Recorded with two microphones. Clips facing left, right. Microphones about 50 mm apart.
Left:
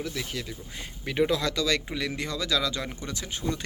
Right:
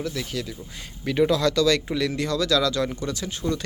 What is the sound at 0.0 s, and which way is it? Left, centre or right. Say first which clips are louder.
Speech: right 4 dB; centre.